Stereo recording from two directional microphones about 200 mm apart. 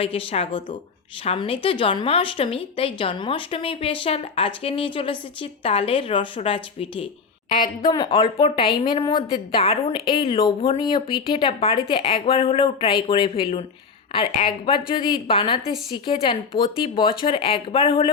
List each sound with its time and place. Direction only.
0.0 s speech: 25° left (ahead or behind)